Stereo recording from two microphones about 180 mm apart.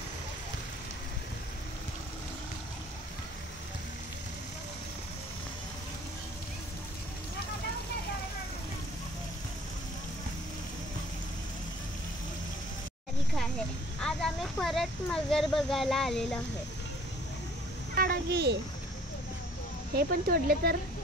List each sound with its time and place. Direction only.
14.0 s speech: centre (ahead or behind)
17.9 s a sound: 55° right (ahead or behind)
20.0 s speech: 60° right (ahead or behind)